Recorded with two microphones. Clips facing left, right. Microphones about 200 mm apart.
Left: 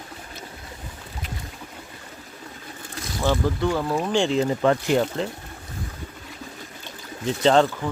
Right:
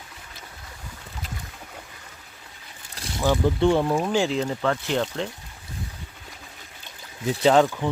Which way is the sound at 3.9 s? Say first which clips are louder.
Left 1 dB; 5° right (ahead or behind).